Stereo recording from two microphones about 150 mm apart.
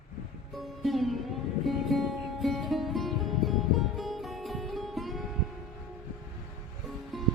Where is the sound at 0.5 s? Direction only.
Centre (ahead or behind).